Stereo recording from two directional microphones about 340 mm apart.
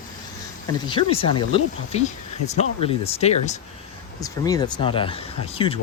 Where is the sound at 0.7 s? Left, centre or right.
Centre.